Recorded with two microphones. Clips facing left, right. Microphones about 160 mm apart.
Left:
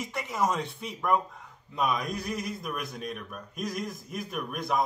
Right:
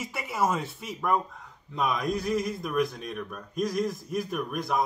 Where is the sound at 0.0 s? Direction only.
5° right (ahead or behind).